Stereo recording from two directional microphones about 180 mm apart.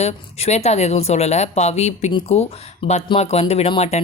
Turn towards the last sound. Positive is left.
turn(degrees=35)  # may be behind; listen again after turning